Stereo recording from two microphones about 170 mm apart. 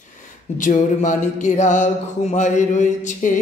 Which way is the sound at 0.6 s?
50° left (ahead or behind).